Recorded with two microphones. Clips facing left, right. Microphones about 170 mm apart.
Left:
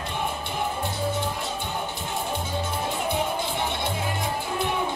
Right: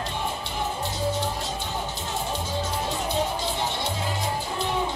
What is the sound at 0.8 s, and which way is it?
Music, 55° left (ahead or behind).